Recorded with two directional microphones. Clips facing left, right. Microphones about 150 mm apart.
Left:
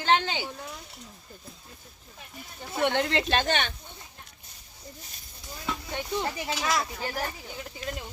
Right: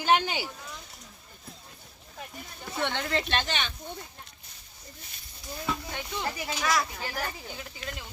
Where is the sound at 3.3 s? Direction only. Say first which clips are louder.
Left 4 dB; 50° left (ahead or behind).